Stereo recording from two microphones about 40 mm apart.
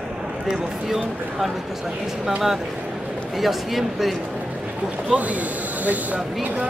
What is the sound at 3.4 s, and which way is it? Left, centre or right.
Speech, centre.